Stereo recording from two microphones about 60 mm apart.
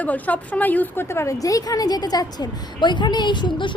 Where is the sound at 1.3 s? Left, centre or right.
Left.